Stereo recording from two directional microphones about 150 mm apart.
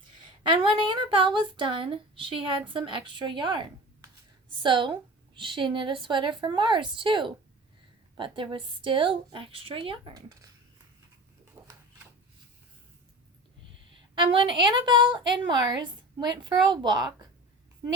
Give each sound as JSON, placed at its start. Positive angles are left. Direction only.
{"t": 0.2, "sound": "a woman's voice", "side_deg": -30}
{"t": 11.6, "sound": "a sound", "side_deg": -20}
{"t": 14.2, "sound": "a woman's voice", "side_deg": -35}